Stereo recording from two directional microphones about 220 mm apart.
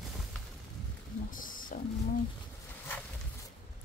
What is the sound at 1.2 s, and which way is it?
Wild animals, 40° left (ahead or behind).